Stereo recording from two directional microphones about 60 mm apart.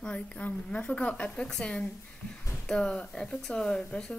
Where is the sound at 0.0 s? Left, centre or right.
Centre.